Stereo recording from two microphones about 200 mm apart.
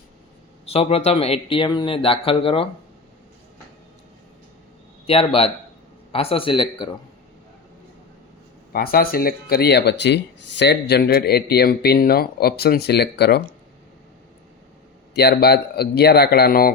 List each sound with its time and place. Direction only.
0.6 s speech: 30° left (ahead or behind)
5.0 s speech: 30° left (ahead or behind)
8.7 s speech: 50° left (ahead or behind)
15.1 s speech: 55° left (ahead or behind)